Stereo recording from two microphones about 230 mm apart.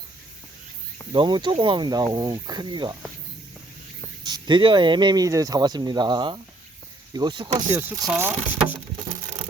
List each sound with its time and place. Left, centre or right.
1.1 s speech: centre
4.2 s speech: centre
7.7 s speech: centre